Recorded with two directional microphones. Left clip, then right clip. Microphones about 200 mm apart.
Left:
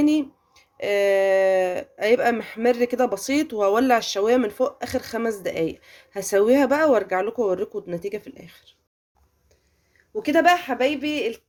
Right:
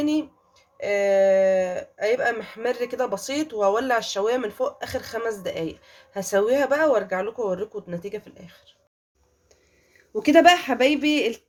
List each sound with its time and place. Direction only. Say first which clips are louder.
0.0 s speech: left 4 dB; 35° left (ahead or behind)
10.2 s speech: right 3 dB; 10° right (ahead or behind)